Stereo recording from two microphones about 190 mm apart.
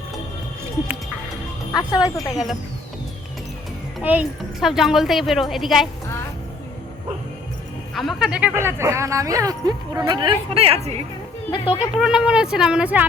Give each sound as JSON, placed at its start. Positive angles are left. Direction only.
{"t": 1.7, "sound": "speech", "side_deg": 20}
{"t": 4.0, "sound": "speech", "side_deg": -5}
{"t": 7.9, "sound": "speech", "side_deg": 0}
{"t": 11.6, "sound": "speech", "side_deg": -5}